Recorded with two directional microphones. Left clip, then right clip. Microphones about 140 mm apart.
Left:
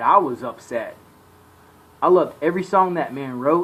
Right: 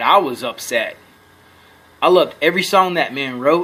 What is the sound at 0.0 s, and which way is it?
Speech, 45° right (ahead or behind).